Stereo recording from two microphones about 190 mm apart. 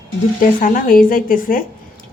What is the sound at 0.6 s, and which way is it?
A woman's voice, 45° left (ahead or behind).